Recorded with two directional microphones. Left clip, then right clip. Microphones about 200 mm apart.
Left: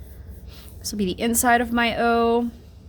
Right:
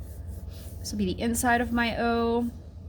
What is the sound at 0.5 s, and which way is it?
A woman's voice, 40° left (ahead or behind).